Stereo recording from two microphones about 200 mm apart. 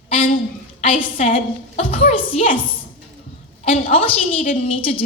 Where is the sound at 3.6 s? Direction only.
30° left (ahead or behind).